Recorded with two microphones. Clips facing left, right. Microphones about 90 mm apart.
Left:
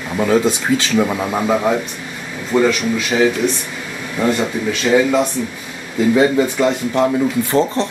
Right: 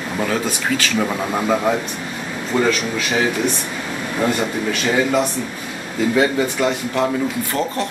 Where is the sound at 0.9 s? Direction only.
10° left (ahead or behind).